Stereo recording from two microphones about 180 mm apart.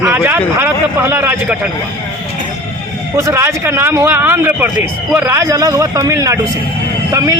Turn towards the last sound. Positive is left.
turn(degrees=-20)  # may be behind; listen again after turning